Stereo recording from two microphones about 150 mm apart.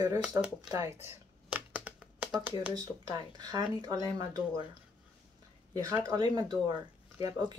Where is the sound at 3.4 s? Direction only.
25° right (ahead or behind).